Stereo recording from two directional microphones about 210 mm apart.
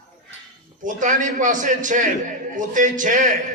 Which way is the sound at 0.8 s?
40° right (ahead or behind).